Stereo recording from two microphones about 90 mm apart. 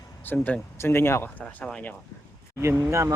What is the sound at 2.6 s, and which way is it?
Speech, 30° right (ahead or behind).